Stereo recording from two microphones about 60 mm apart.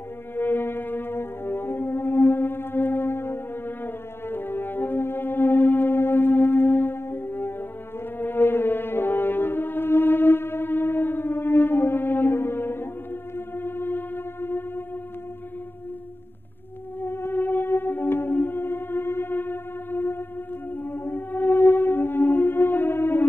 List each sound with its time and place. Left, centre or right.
0.4 s brass instrument: left
13.6 s a sound: left
17.0 s music: left